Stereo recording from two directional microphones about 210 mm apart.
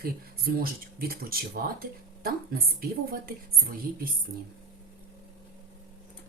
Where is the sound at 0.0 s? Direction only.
45° right (ahead or behind).